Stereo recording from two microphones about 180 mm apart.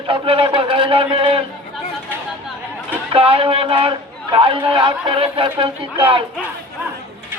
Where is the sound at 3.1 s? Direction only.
30° right (ahead or behind).